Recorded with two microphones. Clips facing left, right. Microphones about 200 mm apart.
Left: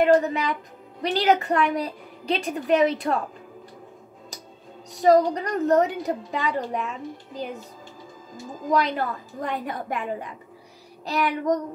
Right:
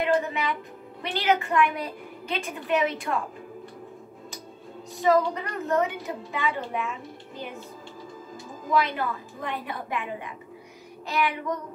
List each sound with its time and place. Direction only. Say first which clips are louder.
0.0 s a woman's voice: left 6 dB; 40° left (ahead or behind)
4.9 s a woman's voice: left 4 dB; 40° left (ahead or behind)
8.6 s a woman's voice: left 2 dB; 40° left (ahead or behind)